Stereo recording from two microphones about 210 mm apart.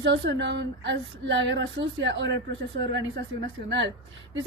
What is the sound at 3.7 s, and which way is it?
Speech, 55° right (ahead or behind).